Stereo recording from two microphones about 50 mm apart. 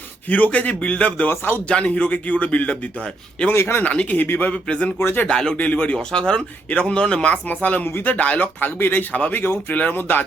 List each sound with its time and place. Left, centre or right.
0.3 s a man's voice: left
1.3 s speech: left
1.6 s a man's voice: left
3.5 s speech: left
3.8 s speech: left
4.5 s a man's voice: left
5.5 s a man's voice: left
6.1 s a man's voice: centre
7.4 s a man's voice: left
8.6 s speech: left